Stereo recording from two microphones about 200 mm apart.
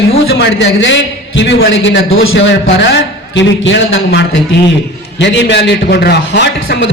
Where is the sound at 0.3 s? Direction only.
65° left (ahead or behind).